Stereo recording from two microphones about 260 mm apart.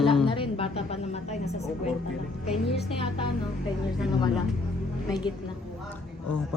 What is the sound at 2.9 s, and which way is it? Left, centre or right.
Speech, centre.